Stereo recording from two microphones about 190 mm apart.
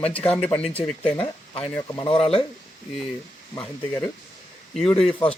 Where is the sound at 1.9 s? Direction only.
25° left (ahead or behind).